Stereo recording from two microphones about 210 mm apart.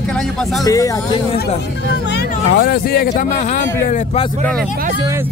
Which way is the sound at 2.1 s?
50° left (ahead or behind).